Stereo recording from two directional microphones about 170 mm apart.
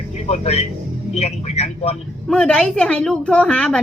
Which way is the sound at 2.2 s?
5° left (ahead or behind).